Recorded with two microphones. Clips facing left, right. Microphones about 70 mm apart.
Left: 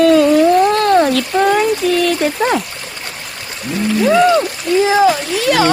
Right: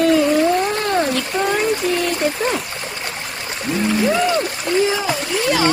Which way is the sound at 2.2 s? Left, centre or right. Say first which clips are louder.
Left 4 dB; left.